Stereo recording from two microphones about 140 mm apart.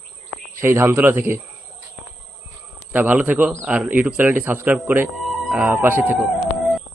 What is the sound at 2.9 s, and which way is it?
A man's voice, 10° right (ahead or behind).